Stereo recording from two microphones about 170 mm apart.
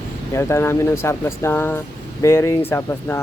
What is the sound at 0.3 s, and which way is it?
Speech, 15° left (ahead or behind).